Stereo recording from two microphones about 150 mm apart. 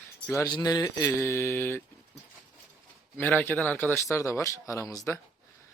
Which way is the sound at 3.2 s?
10° left (ahead or behind).